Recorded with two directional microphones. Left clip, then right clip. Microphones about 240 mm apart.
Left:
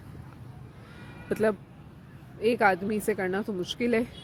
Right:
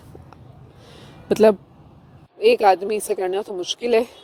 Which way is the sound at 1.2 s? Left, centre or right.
Right.